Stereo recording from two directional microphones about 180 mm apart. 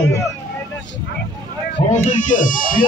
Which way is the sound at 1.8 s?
45° left (ahead or behind).